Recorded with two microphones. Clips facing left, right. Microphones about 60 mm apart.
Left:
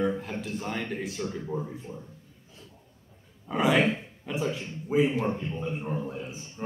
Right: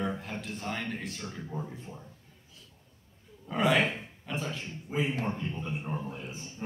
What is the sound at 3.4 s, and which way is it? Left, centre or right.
A man's voice, centre.